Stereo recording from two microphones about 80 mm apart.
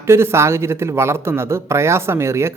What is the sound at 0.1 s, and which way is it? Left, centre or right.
A man's voice, right.